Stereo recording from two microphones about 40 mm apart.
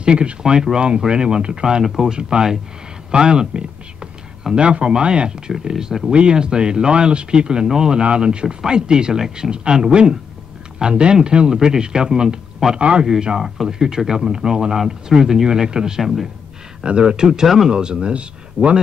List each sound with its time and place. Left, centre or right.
0.0 s speech: right
5.5 s speech: centre
8.0 s speech: right
13.4 s speech: centre
16.0 s a man's voice: centre
16.8 s speech: right
17.3 s speech: centre; by 18.8 s right